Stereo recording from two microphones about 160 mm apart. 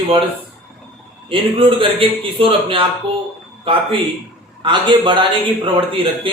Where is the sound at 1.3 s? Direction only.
35° right (ahead or behind).